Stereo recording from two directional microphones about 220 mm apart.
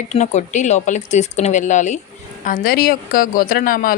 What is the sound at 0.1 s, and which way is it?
A woman's voice, 30° left (ahead or behind).